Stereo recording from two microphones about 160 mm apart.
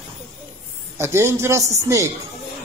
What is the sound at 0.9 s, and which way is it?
A man's voice, 15° right (ahead or behind).